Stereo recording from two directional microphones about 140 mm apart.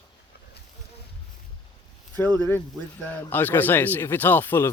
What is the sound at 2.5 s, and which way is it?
Speech, 15° left (ahead or behind).